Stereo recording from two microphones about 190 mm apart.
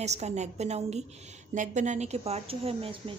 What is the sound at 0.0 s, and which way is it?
A woman's voice, 35° right (ahead or behind).